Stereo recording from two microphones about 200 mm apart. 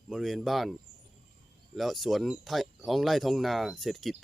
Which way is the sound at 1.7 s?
Centre (ahead or behind).